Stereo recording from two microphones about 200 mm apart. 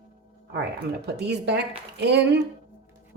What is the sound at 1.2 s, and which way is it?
Speech, 60° right (ahead or behind).